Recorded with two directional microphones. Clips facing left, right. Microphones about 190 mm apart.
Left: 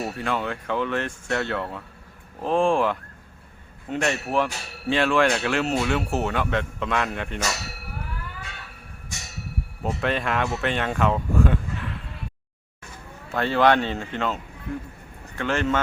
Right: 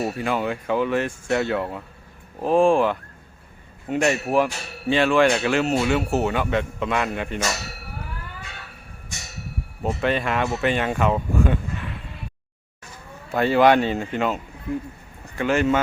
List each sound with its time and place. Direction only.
0.0 s speech: 5° right (ahead or behind)
9.8 s speech: centre (ahead or behind)
13.3 s speech: 10° right (ahead or behind)
15.4 s speech: 10° right (ahead or behind)